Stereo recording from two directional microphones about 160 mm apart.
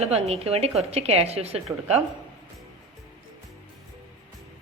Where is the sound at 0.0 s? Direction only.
40° right (ahead or behind).